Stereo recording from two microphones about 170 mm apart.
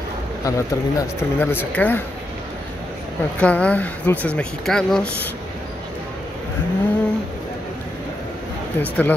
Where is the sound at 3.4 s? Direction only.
5° left (ahead or behind).